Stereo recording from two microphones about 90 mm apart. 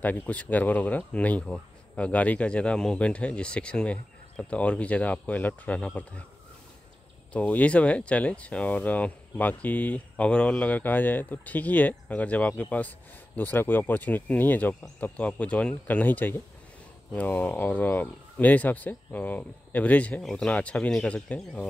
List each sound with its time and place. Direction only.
0.0 s speech: 15° left (ahead or behind)
7.3 s speech: 15° left (ahead or behind)